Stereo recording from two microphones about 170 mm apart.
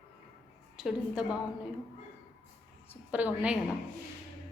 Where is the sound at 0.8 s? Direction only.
5° right (ahead or behind).